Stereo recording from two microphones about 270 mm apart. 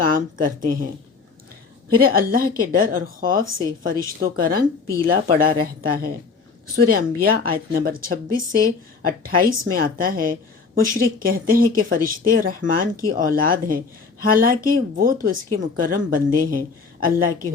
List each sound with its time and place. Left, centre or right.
0.0 s speech: right
2.0 s a woman's voice: right